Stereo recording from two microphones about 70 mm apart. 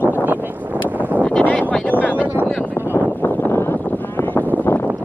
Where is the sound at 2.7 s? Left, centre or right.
Left.